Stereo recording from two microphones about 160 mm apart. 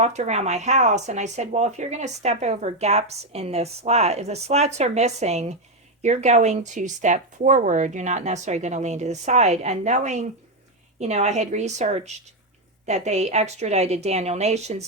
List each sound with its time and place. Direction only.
0.0 s speech: 45° right (ahead or behind)